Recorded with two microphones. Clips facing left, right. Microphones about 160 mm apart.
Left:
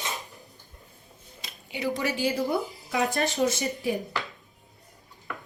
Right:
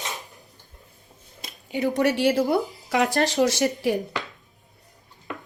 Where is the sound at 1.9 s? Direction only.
70° right (ahead or behind).